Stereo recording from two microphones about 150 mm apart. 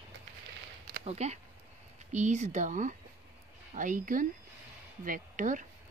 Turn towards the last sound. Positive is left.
turn(degrees=-60)  # may be behind; listen again after turning